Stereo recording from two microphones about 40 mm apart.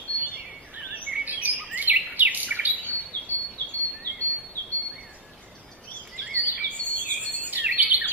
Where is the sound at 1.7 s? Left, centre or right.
Right.